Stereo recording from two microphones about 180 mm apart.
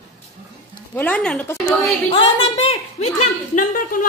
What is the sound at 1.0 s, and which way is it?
Speech, 5° left (ahead or behind).